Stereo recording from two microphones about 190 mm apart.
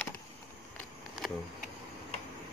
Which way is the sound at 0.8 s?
Centre (ahead or behind).